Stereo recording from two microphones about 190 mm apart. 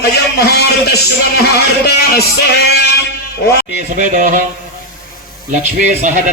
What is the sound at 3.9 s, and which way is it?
Speech, 45° right (ahead or behind).